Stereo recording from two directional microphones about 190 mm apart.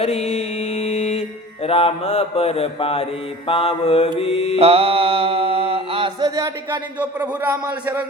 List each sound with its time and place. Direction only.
0.0 s mantra: 35° left (ahead or behind)
4.5 s mantra: 30° right (ahead or behind)
7.0 s a man's voice: 10° right (ahead or behind)